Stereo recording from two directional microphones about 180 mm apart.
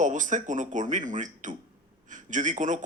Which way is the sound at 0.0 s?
45° right (ahead or behind).